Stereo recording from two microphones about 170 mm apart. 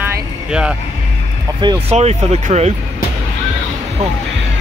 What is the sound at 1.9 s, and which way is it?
Speech, 40° right (ahead or behind).